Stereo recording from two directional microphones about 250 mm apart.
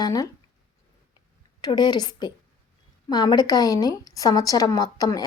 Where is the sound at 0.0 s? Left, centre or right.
Centre.